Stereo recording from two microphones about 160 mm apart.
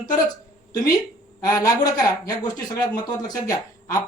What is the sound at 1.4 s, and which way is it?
Speech, 20° left (ahead or behind).